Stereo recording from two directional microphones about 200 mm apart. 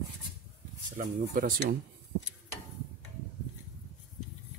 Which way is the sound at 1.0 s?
45° right (ahead or behind).